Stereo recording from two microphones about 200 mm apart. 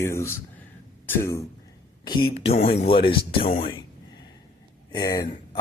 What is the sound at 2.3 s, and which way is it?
Speech, 30° left (ahead or behind).